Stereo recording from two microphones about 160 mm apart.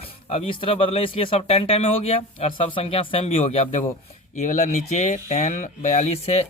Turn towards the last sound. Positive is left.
turn(degrees=40)  # may be behind; listen again after turning